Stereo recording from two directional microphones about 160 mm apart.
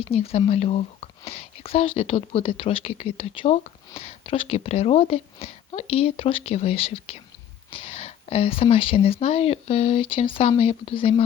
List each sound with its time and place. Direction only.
0.0 s speech: 40° left (ahead or behind)